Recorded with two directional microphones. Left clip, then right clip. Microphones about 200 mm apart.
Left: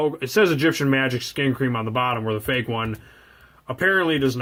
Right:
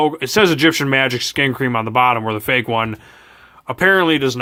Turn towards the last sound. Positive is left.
turn(degrees=-40)  # may be behind; listen again after turning